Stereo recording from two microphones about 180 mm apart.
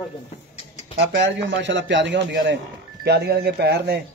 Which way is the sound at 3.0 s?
65° right (ahead or behind).